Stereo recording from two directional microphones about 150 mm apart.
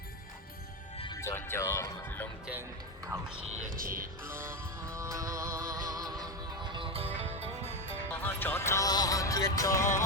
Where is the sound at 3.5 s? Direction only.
65° right (ahead or behind).